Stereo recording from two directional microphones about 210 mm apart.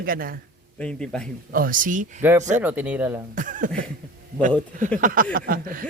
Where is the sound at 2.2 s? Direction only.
15° right (ahead or behind).